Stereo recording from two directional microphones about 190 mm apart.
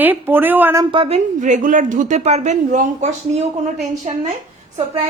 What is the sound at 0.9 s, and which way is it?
Speech, 30° right (ahead or behind).